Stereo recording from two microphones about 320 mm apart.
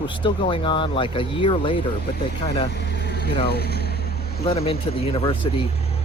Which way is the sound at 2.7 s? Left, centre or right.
Left.